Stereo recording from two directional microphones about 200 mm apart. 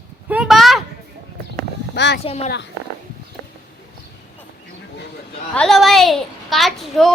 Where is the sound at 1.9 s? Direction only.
60° left (ahead or behind).